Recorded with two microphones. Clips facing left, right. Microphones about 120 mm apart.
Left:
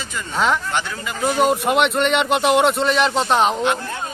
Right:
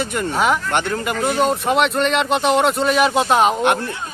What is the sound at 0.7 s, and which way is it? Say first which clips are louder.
Speech: right 4 dB; 55° right (ahead or behind).